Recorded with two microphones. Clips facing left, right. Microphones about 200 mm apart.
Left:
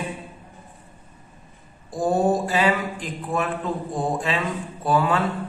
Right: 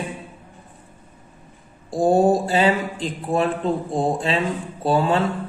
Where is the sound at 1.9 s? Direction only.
30° right (ahead or behind).